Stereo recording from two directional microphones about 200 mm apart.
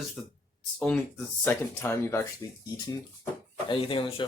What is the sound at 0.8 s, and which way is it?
Speech, 5° left (ahead or behind).